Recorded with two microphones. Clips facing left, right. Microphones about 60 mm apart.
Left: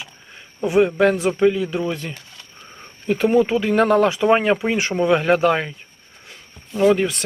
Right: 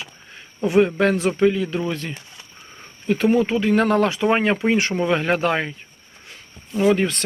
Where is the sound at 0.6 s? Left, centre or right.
Centre.